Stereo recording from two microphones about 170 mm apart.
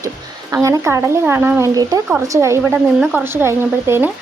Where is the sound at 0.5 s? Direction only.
15° right (ahead or behind).